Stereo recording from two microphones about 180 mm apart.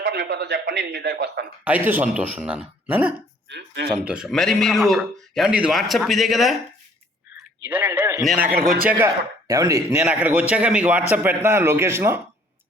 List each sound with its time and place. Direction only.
0.0 s a man's voice: 70° right (ahead or behind)
1.6 s a man's voice: 10° right (ahead or behind)
7.6 s a man's voice: 10° right (ahead or behind)